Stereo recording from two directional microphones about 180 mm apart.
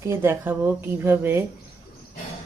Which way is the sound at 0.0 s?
15° right (ahead or behind).